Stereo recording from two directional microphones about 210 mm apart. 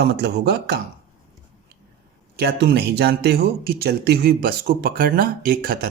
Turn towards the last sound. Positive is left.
turn(degrees=-45)  # may be behind; listen again after turning